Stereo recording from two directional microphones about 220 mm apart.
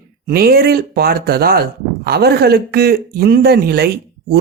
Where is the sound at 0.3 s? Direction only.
45° right (ahead or behind).